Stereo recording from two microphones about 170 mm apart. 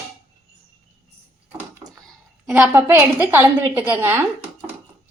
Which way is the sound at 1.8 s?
15° right (ahead or behind).